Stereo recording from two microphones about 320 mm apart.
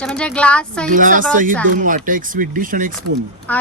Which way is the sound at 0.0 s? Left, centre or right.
Centre.